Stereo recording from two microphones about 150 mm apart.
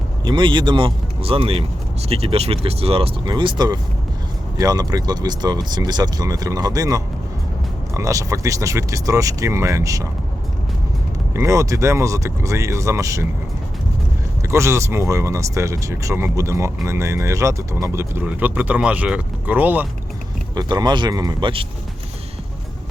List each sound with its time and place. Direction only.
0.3 s speech: 30° right (ahead or behind)
11.3 s speech: 20° right (ahead or behind)
14.5 s speech: 20° right (ahead or behind)
20.6 s speech: 30° right (ahead or behind)